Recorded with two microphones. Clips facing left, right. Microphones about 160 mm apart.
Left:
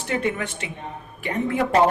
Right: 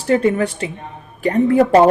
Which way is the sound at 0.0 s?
35° right (ahead or behind).